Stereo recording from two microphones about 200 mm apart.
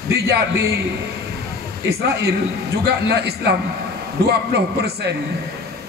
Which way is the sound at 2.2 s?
55° right (ahead or behind).